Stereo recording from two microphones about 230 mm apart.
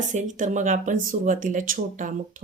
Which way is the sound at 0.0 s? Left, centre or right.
Right.